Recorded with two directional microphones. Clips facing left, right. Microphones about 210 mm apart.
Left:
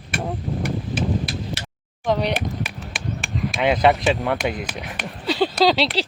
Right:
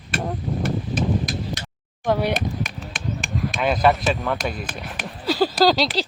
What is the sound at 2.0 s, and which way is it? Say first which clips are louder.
Speech: even; 5° right (ahead or behind).